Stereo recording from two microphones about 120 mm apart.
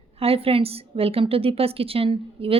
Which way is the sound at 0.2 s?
55° right (ahead or behind).